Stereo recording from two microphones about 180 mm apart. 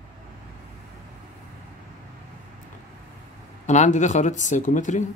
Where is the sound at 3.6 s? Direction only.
40° left (ahead or behind).